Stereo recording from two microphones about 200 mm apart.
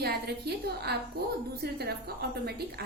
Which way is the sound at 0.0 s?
55° right (ahead or behind).